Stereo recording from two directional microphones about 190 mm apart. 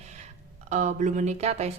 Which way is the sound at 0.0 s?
35° right (ahead or behind).